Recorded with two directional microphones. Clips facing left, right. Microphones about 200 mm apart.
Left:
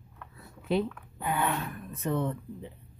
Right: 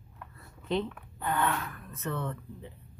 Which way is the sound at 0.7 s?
10° left (ahead or behind).